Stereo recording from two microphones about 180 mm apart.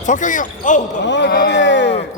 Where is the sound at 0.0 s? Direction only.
45° left (ahead or behind).